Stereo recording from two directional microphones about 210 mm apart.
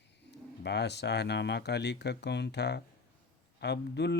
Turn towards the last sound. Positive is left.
turn(degrees=55)  # may be behind; listen again after turning